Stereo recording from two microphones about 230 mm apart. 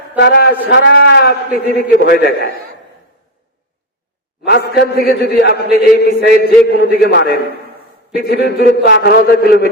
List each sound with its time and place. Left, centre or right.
0.2 s a man's voice: left
4.4 s a man's voice: left